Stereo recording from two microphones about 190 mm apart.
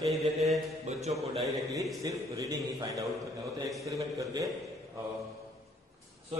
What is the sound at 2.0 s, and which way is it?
A man's voice, 15° right (ahead or behind).